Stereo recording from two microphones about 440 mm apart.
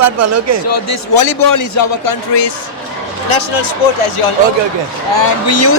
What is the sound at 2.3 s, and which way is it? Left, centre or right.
Speech, left.